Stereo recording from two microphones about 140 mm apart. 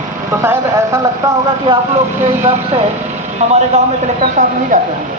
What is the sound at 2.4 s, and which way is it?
Speech, 45° right (ahead or behind).